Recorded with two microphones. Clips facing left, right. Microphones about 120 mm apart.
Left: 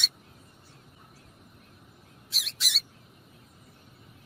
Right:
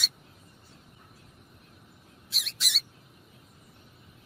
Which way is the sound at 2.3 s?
Centre (ahead or behind).